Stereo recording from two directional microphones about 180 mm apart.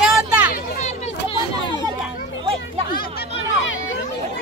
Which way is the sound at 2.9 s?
60° left (ahead or behind).